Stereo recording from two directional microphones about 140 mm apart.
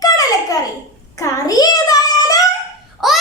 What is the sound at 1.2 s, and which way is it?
Child singing, 25° left (ahead or behind).